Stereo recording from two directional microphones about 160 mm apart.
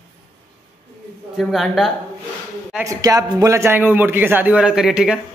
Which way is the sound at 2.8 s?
20° right (ahead or behind).